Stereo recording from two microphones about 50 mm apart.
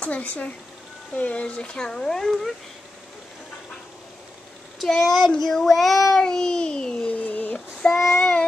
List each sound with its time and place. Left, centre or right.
0.0 s speech: left; by 2.5 s centre
4.8 s speech: centre
6.2 s speech: centre
7.1 s a sound: left
7.8 s speech: centre